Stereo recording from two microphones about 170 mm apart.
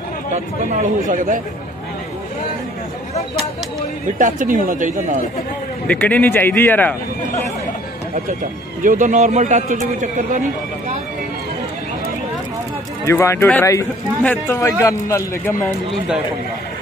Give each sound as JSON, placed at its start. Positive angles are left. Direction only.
{"t": 0.3, "sound": "a man's voice", "side_deg": -45}
{"t": 4.2, "sound": "a man's voice", "side_deg": -50}
{"t": 5.9, "sound": "speech", "side_deg": 10}
{"t": 8.8, "sound": "a man's voice", "side_deg": -50}
{"t": 13.0, "sound": "speech", "side_deg": 15}